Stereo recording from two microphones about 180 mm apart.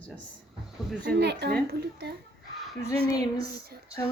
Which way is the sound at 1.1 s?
65° right (ahead or behind).